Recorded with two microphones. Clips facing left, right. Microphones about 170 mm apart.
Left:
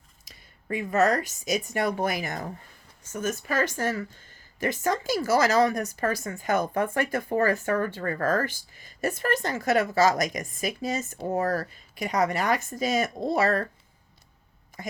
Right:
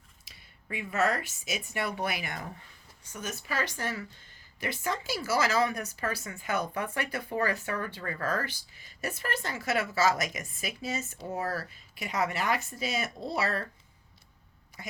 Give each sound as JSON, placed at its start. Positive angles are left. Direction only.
{"t": 0.3, "sound": "speech", "side_deg": 45}
{"t": 14.7, "sound": "a woman's voice", "side_deg": 50}